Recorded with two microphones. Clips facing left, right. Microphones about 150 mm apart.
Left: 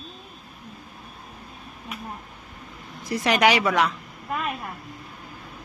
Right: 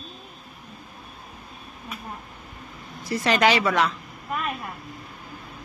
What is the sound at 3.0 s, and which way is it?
Speech, 15° left (ahead or behind).